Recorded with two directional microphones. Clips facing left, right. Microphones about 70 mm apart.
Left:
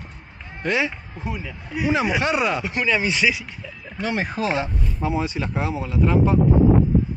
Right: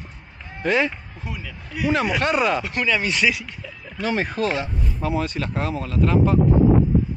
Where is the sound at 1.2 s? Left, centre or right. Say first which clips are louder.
Left 4 dB; centre.